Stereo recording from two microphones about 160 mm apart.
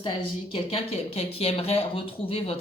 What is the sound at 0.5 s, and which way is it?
Speech, 35° left (ahead or behind).